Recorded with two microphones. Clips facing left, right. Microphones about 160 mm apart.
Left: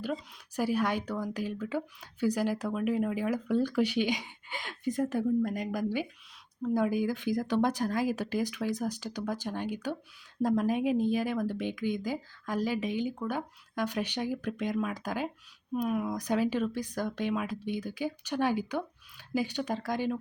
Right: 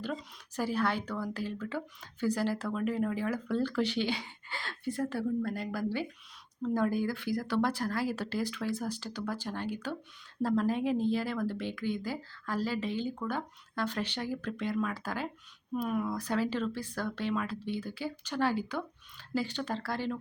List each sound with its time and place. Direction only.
0.0 s speech: 10° left (ahead or behind)